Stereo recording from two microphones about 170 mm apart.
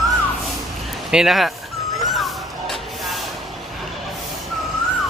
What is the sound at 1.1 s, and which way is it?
Speech, centre (ahead or behind).